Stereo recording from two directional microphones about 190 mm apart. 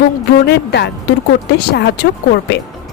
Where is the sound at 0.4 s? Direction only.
60° left (ahead or behind).